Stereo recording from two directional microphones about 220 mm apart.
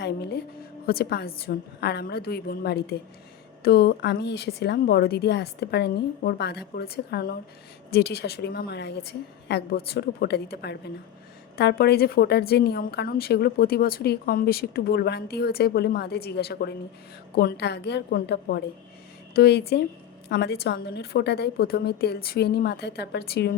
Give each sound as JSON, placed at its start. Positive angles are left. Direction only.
{"t": 0.0, "sound": "a woman's voice", "side_deg": 50}